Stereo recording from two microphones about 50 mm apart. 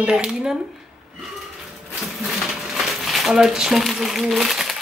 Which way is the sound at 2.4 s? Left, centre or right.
Centre.